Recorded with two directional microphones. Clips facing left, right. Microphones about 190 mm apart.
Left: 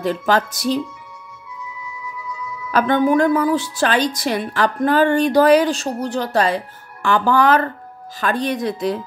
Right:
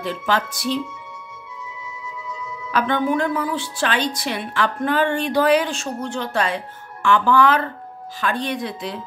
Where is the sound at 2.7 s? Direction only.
45° left (ahead or behind).